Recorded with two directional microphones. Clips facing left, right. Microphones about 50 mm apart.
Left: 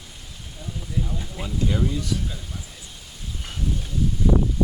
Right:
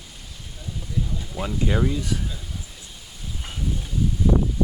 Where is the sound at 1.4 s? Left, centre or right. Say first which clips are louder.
Right 2 dB; right.